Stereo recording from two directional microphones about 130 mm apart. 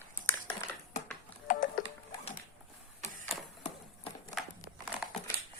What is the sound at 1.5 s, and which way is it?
Typing, 90° left.